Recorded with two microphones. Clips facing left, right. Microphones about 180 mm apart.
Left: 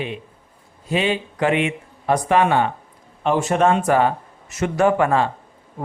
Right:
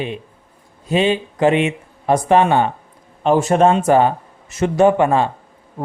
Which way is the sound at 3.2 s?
35° right (ahead or behind).